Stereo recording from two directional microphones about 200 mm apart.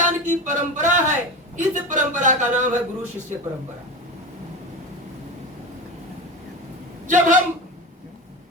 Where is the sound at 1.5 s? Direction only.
40° right (ahead or behind).